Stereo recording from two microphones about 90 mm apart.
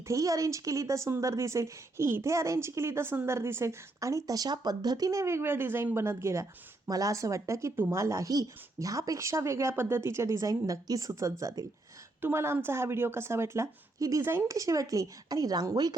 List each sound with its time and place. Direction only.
0.1 s a woman's voice: 40° right (ahead or behind)